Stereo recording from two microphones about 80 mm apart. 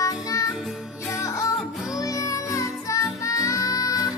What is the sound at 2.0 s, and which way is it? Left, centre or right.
Music, left.